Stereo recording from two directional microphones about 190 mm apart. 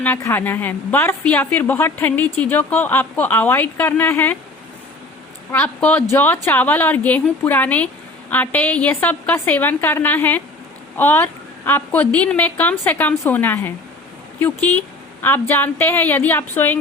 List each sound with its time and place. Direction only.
0.0 s a woman's voice: 10° left (ahead or behind)
5.5 s a woman's voice: 10° left (ahead or behind)